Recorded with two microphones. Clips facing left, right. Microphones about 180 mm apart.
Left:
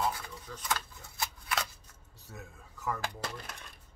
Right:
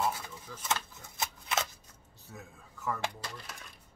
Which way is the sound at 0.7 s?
20° right (ahead or behind).